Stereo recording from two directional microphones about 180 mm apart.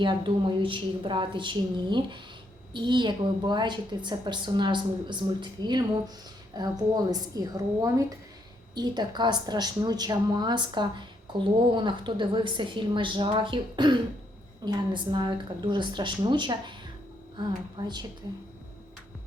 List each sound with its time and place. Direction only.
0.0 s a woman's voice: 25° right (ahead or behind)